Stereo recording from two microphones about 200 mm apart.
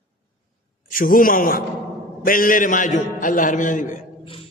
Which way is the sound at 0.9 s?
45° left (ahead or behind).